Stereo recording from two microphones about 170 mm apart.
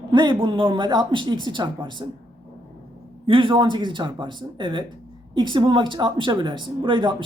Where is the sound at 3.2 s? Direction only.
30° right (ahead or behind).